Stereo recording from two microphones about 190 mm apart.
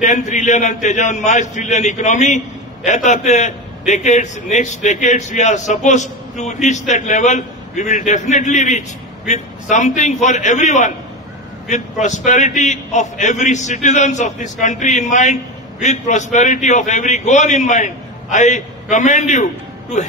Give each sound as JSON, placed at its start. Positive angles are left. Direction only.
{"t": 0.0, "sound": "a man's voice", "side_deg": 40}